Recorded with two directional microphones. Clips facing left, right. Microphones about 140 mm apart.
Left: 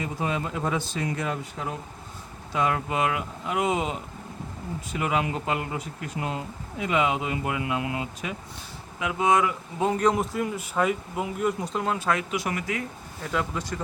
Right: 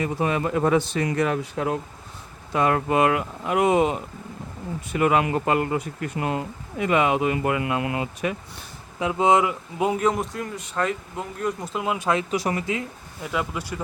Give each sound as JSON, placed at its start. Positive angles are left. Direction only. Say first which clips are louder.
{"t": 0.0, "sound": "speech", "louder": "right 5 dB", "side_deg": -65}
{"t": 2.5, "sound": "speech", "louder": "right 5 dB", "side_deg": -55}
{"t": 9.0, "sound": "speech", "louder": "right 3 dB", "side_deg": -30}
{"t": 11.9, "sound": "speech", "louder": "right 3 dB", "side_deg": -20}
{"t": 12.3, "sound": "speech", "louder": "right 4 dB", "side_deg": -35}
{"t": 13.2, "sound": "speech", "louder": "right 1 dB", "side_deg": -5}